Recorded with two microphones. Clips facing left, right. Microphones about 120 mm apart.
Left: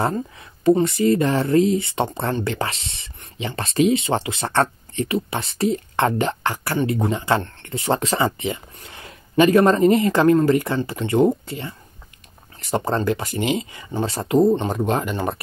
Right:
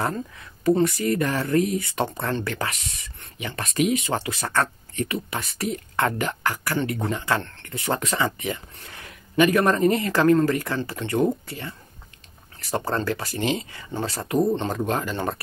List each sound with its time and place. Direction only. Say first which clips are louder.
0.0 s speech: left 4 dB; 25° left (ahead or behind)